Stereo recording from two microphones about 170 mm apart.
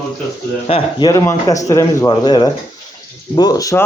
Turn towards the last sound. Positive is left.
turn(degrees=20)  # may be behind; listen again after turning